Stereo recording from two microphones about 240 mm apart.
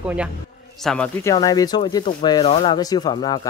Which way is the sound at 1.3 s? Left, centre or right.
Centre.